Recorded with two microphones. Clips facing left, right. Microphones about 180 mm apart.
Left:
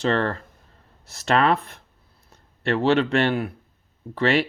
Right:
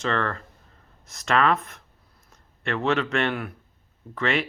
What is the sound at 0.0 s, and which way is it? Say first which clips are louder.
Speech: left 4 dB; 35° left (ahead or behind).